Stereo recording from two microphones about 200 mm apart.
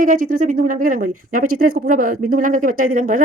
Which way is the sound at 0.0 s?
40° right (ahead or behind).